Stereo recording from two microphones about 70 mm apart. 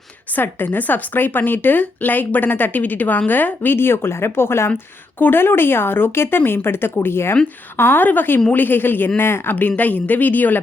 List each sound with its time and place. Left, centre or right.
0.3 s speech: left